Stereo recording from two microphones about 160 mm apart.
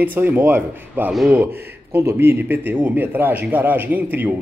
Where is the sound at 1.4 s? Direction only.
15° right (ahead or behind).